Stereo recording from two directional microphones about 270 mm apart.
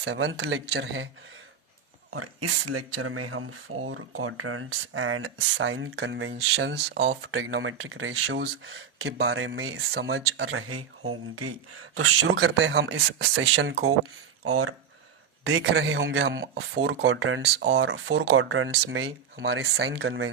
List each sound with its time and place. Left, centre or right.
0.0 s speech: right
2.0 s speech: right
15.4 s speech: right